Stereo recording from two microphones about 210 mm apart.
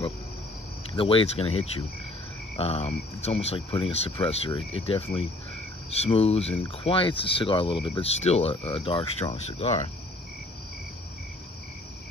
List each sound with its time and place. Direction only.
0.9 s speech: 25° left (ahead or behind)